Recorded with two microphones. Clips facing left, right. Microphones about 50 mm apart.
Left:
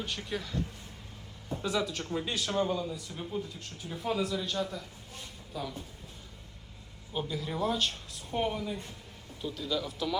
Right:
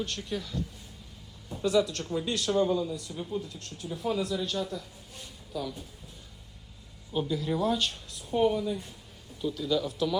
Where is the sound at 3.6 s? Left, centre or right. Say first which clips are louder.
Right 3 dB; centre.